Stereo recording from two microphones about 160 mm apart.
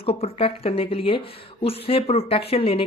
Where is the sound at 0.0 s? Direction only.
35° left (ahead or behind).